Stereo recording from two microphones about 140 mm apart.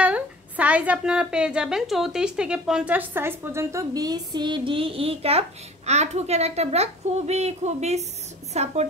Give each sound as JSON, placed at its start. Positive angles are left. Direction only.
{"t": 0.0, "sound": "a woman's voice", "side_deg": -10}